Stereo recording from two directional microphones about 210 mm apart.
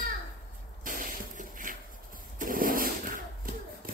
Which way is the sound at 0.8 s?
40° right (ahead or behind).